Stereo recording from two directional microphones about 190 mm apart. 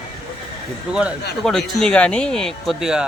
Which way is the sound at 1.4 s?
5° left (ahead or behind).